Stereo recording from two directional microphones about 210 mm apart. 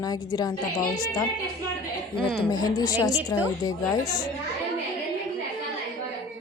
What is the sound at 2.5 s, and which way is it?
A woman's voice, 20° left (ahead or behind).